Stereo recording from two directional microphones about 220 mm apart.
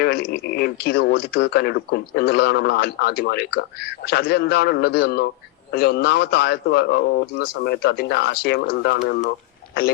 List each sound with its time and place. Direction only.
0.0 s speech: 45° left (ahead or behind)